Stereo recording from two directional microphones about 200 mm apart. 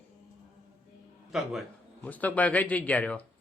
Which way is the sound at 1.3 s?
5° left (ahead or behind).